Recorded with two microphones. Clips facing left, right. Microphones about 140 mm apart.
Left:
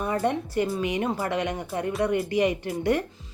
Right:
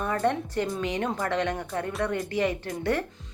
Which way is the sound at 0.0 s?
10° left (ahead or behind).